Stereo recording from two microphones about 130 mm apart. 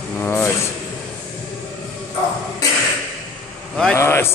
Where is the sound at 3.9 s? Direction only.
20° left (ahead or behind).